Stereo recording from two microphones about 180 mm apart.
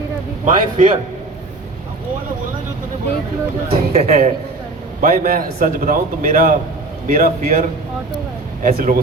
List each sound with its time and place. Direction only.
0.4 s a man's voice: 45° right (ahead or behind)
3.7 s speech: 35° right (ahead or behind)
4.9 s a man's voice: 50° right (ahead or behind)
8.6 s a man's voice: 45° right (ahead or behind)